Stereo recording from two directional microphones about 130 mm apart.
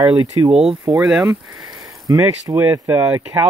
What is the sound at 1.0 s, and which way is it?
Speech, 5° right (ahead or behind).